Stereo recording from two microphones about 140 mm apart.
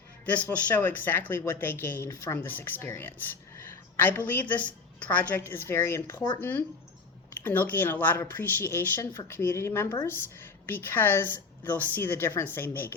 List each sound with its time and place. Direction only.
0.3 s speech: 10° left (ahead or behind)
3.6 s a sound: 15° left (ahead or behind)
4.3 s speech: 15° left (ahead or behind)